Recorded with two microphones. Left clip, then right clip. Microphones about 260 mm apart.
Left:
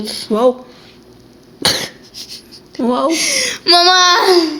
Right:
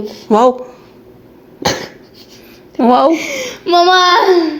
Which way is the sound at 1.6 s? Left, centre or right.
Centre.